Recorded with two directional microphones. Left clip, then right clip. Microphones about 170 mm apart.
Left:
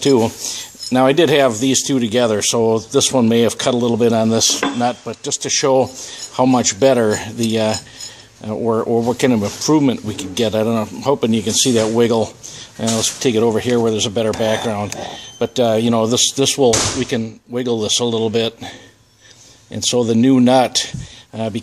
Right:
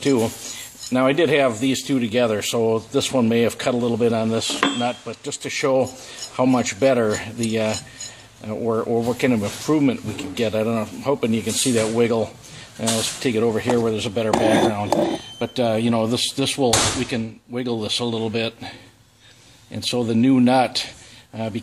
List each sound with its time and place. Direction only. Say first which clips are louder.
0.0 s speech: left 6 dB; 45° left (ahead or behind)
19.7 s speech: left 6 dB; 35° left (ahead or behind)